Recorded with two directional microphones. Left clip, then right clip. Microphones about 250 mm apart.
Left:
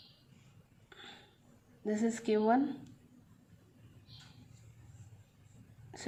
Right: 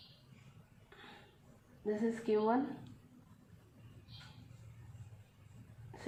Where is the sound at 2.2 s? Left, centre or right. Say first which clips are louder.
Left 3 dB; left.